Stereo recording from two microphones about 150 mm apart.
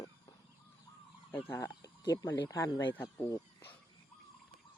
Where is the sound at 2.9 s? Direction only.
15° left (ahead or behind).